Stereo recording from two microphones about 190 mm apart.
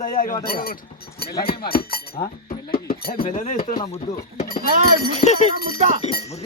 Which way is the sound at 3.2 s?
40° left (ahead or behind).